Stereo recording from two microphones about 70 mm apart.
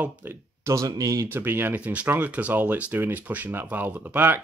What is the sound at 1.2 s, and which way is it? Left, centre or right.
Speech, right.